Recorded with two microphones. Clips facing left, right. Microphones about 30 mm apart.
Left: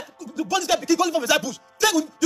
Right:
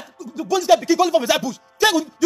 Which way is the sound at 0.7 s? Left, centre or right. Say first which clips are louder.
Right 5 dB; centre.